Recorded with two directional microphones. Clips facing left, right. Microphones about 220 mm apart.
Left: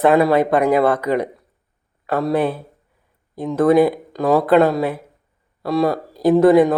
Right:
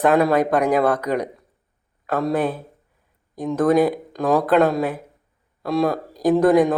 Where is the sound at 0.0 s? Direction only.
5° left (ahead or behind).